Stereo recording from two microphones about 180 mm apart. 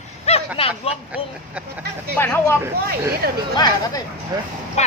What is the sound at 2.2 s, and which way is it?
Speech, 15° left (ahead or behind).